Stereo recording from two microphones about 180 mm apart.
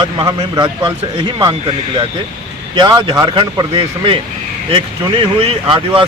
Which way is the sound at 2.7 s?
25° right (ahead or behind).